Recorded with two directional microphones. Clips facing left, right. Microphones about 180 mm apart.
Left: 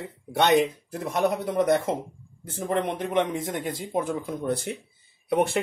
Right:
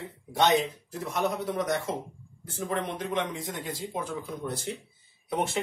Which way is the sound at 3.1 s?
60° left (ahead or behind).